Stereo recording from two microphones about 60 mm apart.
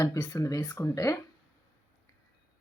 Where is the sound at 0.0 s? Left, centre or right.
Left.